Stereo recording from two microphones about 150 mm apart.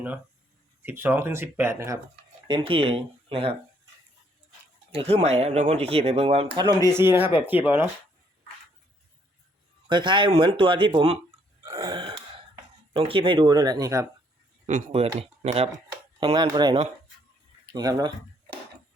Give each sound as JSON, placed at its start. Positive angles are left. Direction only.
{"t": 0.8, "sound": "speech", "side_deg": -15}
{"t": 2.5, "sound": "speech", "side_deg": -35}
{"t": 4.9, "sound": "speech", "side_deg": -45}
{"t": 6.9, "sound": "speech", "side_deg": -15}
{"t": 9.9, "sound": "speech", "side_deg": -30}
{"t": 11.8, "sound": "speech", "side_deg": -25}
{"t": 12.9, "sound": "speech", "side_deg": -40}
{"t": 14.7, "sound": "speech", "side_deg": -50}
{"t": 16.3, "sound": "speech", "side_deg": -30}
{"t": 17.7, "sound": "speech", "side_deg": -25}